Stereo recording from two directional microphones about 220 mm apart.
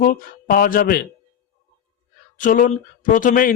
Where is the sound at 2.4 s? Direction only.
35° left (ahead or behind).